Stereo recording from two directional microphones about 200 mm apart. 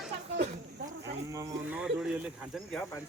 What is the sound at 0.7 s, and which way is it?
Speech, 60° right (ahead or behind).